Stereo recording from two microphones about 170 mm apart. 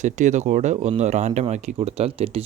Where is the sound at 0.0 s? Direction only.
45° right (ahead or behind).